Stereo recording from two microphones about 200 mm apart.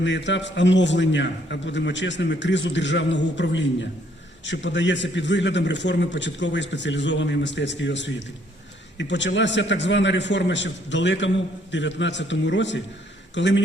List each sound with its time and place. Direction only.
0.0 s a man's voice: 65° left (ahead or behind)